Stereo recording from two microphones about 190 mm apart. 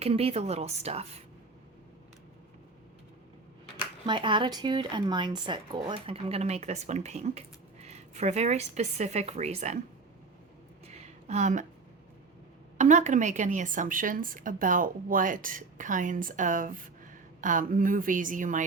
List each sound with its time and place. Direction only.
0.0 s speech: 30° right (ahead or behind)
4.0 s speech: 25° right (ahead or behind)
10.8 s a sound: 35° right (ahead or behind)
12.7 s a woman's voice: 40° right (ahead or behind)